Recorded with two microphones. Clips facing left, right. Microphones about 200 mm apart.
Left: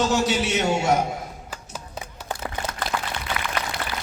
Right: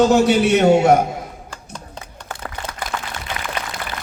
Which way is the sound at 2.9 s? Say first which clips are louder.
Left 1 dB; 45° right (ahead or behind).